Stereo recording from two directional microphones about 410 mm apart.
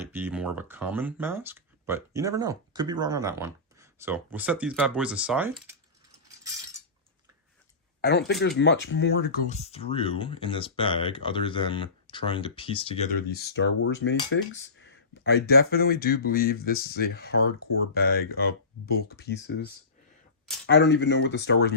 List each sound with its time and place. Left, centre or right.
0.1 s speech: centre
8.3 s speech: left